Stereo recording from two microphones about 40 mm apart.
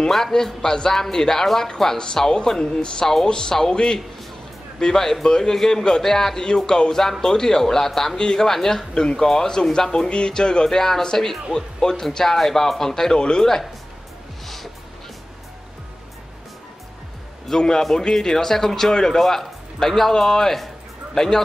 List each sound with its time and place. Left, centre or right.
0.1 s speech: centre
14.4 s music: centre
17.5 s speech: centre